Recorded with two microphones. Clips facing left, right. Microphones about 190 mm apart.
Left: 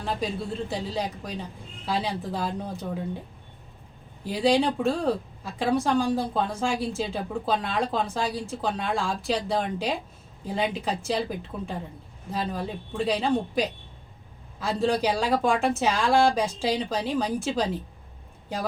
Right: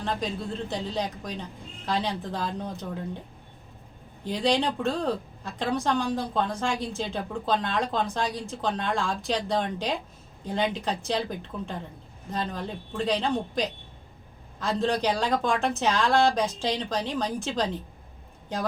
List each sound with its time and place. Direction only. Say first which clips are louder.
0.0 s speech: left 1 dB; 5° left (ahead or behind)
4.2 s speech: left 3 dB; 5° left (ahead or behind)